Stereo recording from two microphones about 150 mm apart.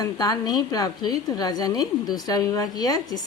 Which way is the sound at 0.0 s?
25° left (ahead or behind).